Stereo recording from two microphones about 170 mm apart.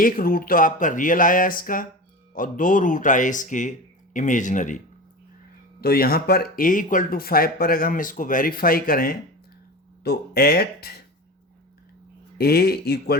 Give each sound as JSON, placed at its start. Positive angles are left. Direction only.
{"t": 0.0, "sound": "speech", "side_deg": 60}
{"t": 5.8, "sound": "speech", "side_deg": 60}
{"t": 10.0, "sound": "speech", "side_deg": 70}
{"t": 12.4, "sound": "speech", "side_deg": 65}